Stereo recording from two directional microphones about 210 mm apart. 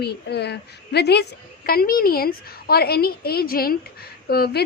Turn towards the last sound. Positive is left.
turn(degrees=50)  # may be behind; listen again after turning